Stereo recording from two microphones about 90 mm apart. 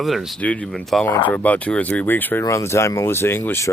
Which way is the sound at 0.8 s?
Centre (ahead or behind).